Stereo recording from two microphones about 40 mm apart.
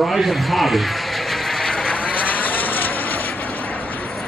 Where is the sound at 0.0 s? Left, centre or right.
Centre.